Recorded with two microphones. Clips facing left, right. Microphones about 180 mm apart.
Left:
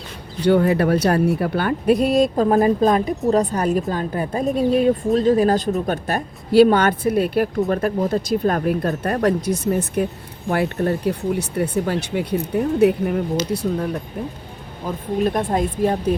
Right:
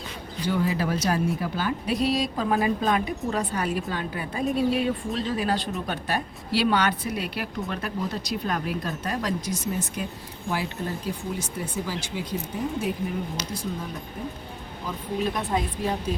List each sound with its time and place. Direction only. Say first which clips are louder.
0.4 s a woman's voice: left 10 dB; 65° left (ahead or behind)
14.8 s a woman's voice: left 7 dB; 50° left (ahead or behind)